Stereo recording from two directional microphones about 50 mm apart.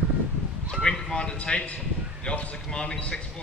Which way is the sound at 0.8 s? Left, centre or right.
Centre.